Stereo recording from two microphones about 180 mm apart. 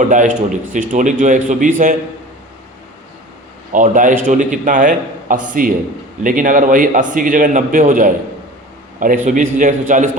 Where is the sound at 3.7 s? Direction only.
45° right (ahead or behind).